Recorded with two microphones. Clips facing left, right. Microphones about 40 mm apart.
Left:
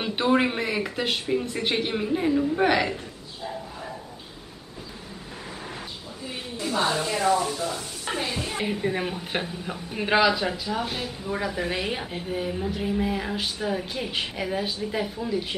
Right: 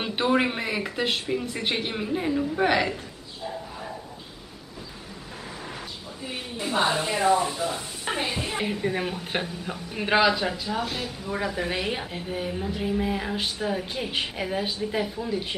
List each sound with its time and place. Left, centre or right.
0.0 s speech: centre
6.6 s a woman's voice: centre
8.6 s speech: centre